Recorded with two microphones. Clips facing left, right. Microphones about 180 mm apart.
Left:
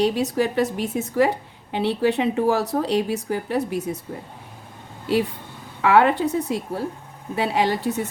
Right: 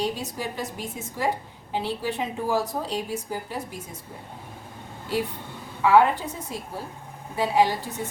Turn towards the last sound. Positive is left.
turn(degrees=65)  # may be behind; listen again after turning